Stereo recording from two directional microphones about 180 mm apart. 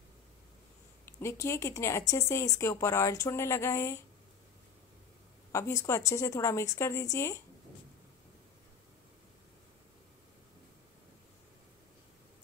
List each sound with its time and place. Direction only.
1.0 s speech: 15° left (ahead or behind)
5.5 s speech: 15° left (ahead or behind)